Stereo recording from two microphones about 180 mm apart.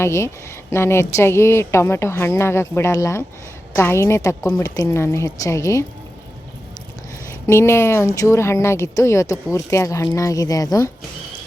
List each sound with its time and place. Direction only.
0.0 s speech: 15° left (ahead or behind)
7.4 s speech: 15° left (ahead or behind)